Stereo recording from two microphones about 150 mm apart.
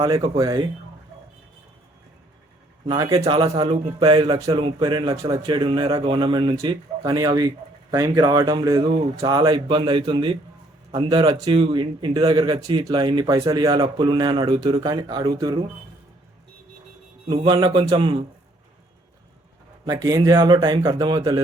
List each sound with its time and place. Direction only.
0.3 s speech: 25° right (ahead or behind)
2.8 s speech: 35° right (ahead or behind)
17.2 s speech: 35° right (ahead or behind)
19.8 s speech: 25° right (ahead or behind)